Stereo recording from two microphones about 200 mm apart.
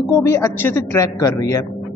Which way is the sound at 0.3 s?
10° left (ahead or behind).